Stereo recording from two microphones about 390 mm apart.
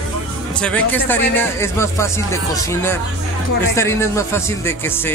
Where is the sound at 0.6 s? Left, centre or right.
Centre.